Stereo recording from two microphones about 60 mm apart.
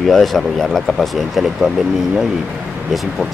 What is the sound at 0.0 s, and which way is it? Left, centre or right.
Speech, centre.